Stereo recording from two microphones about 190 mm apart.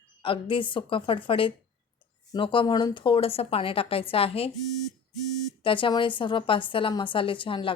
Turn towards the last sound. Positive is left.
turn(degrees=25)  # may be behind; listen again after turning